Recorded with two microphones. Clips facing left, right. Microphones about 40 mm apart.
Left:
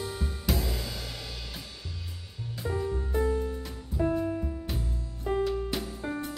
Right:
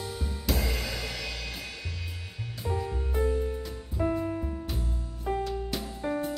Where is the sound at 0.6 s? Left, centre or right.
Right.